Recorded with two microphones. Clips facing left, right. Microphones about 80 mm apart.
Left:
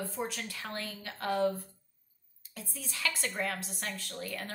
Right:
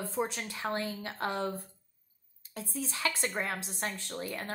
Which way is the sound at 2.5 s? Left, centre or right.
Right.